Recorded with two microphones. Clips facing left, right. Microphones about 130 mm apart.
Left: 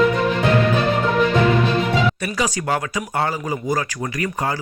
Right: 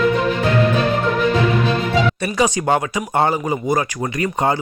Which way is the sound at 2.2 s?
25° right (ahead or behind).